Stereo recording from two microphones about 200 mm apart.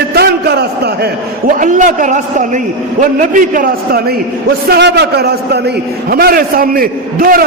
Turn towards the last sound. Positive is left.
turn(degrees=-45)  # may be behind; listen again after turning